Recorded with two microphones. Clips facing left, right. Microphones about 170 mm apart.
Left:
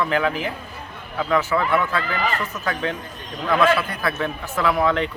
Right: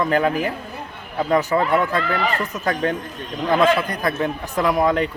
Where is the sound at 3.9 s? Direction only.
40° right (ahead or behind).